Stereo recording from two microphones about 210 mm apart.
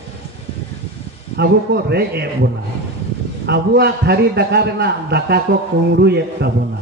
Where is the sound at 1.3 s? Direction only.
50° right (ahead or behind).